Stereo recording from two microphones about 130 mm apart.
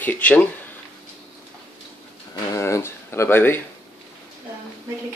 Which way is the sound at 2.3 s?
25° left (ahead or behind).